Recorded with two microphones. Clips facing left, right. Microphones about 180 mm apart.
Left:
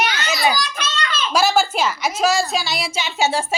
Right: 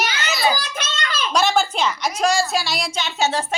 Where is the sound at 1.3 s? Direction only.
5° left (ahead or behind).